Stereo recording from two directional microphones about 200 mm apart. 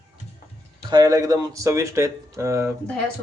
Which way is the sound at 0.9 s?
20° right (ahead or behind).